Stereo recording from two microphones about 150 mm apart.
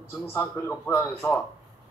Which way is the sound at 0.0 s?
15° left (ahead or behind).